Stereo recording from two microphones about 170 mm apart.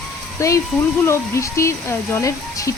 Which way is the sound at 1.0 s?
15° left (ahead or behind).